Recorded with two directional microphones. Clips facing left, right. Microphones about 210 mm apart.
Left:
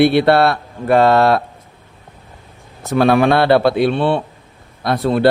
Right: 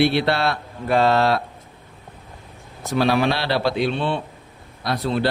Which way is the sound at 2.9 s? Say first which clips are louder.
Left 7 dB; 55° left (ahead or behind).